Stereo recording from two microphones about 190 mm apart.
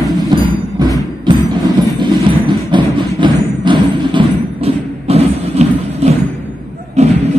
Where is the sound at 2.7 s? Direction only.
25° right (ahead or behind).